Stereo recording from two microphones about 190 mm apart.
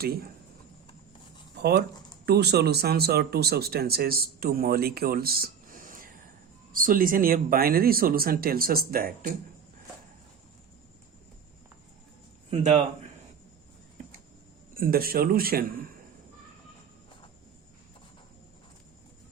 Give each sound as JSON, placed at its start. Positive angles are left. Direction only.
{"t": 0.0, "sound": "speech", "side_deg": -55}
{"t": 1.5, "sound": "speech", "side_deg": -60}
{"t": 12.5, "sound": "a man's voice", "side_deg": -35}
{"t": 14.8, "sound": "speech", "side_deg": -50}